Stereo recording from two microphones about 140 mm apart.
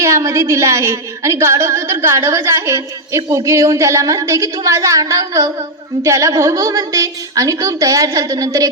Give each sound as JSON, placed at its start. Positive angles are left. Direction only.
{"t": 0.0, "sound": "a woman's voice", "side_deg": -20}